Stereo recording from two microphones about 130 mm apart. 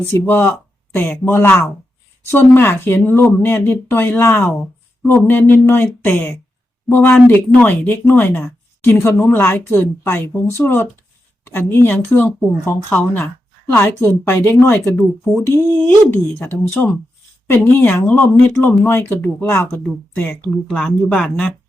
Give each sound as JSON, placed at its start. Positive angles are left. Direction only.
{"t": 0.1, "sound": "speech", "side_deg": 15}
{"t": 14.9, "sound": "speech", "side_deg": 0}
{"t": 16.1, "sound": "speech", "side_deg": 20}